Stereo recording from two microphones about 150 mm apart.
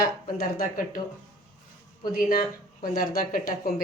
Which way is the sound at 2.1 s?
70° left (ahead or behind).